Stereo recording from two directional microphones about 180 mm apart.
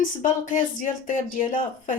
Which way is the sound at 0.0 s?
45° left (ahead or behind).